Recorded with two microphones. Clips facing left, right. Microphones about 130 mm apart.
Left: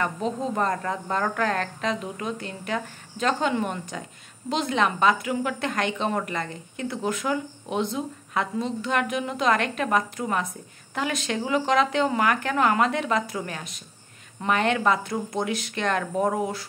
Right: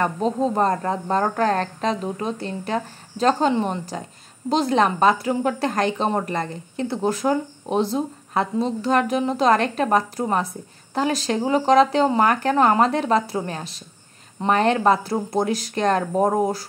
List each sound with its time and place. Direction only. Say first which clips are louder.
0.0 s a woman's voice: right 6 dB; 35° right (ahead or behind)